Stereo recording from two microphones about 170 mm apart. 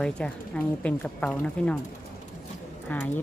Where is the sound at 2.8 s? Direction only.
10° left (ahead or behind).